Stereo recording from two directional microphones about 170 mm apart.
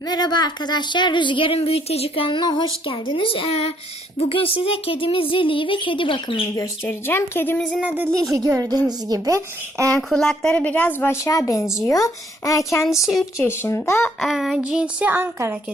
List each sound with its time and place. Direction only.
0.1 s speech: 25° left (ahead or behind)
6.8 s a woman's voice: 15° left (ahead or behind)
7.8 s a sound: 10° right (ahead or behind)
8.3 s speech: 20° right (ahead or behind)
10.1 s a woman's voice: centre (ahead or behind); by 12.8 s 20° left (ahead or behind)
12.8 s speech: centre (ahead or behind)
13.4 s a woman's voice: 15° left (ahead or behind)
14.2 s speech: centre (ahead or behind)